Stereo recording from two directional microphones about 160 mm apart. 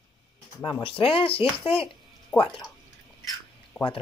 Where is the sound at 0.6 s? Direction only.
25° left (ahead or behind).